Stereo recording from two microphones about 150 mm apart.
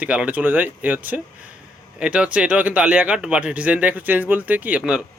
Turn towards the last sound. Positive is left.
turn(degrees=-5)  # may be behind; listen again after turning